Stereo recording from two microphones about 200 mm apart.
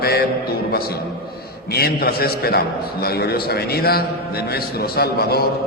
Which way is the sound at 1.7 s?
50° left (ahead or behind).